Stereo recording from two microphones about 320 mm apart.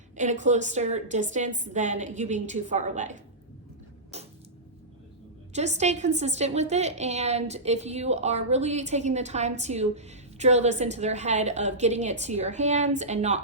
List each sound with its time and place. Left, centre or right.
0.2 s a woman's voice: right
4.1 s creak: centre
5.5 s a woman's voice: right